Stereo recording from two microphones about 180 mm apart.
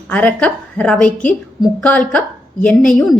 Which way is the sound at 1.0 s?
45° left (ahead or behind).